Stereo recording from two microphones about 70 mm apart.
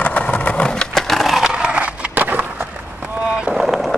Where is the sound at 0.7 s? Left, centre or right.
Centre.